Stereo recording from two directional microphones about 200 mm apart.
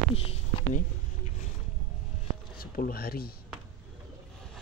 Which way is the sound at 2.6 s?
50° left (ahead or behind).